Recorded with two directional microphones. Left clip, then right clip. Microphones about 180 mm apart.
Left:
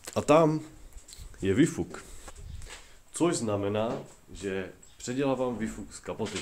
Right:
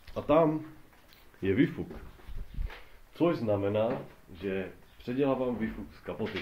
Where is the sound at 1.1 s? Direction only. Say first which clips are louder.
Left 2 dB; 30° left (ahead or behind).